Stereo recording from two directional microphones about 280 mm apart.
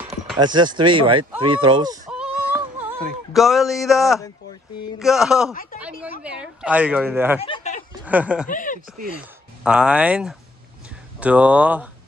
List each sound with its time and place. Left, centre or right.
0.4 s speech: centre
7.4 s a sound: left
8.0 s speech: centre
8.5 s speech: left
9.6 s speech: centre